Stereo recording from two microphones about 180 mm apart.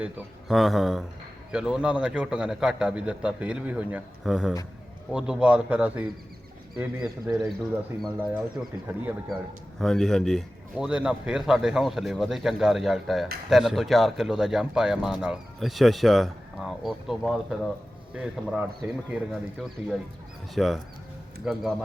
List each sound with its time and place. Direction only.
0.0 s a man's voice: centre (ahead or behind)
8.0 s a man's voice: 5° right (ahead or behind)
9.8 s speech: 5° left (ahead or behind)